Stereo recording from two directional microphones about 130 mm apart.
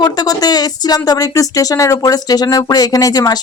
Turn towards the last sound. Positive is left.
turn(degrees=30)  # may be behind; listen again after turning